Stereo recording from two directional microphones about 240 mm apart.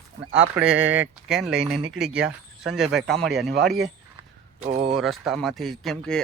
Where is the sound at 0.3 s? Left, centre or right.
Right.